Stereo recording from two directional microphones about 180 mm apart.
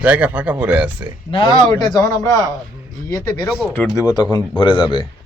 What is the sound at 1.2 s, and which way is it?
A man's voice, 25° left (ahead or behind).